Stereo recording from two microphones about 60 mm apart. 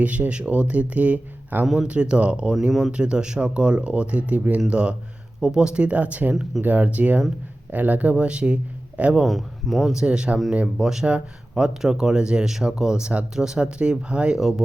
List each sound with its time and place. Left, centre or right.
0.0 s speech: right
1.6 s speech: centre
1.9 s speech: centre
8.1 s speech: centre
9.2 s speech: centre
9.9 s speech: centre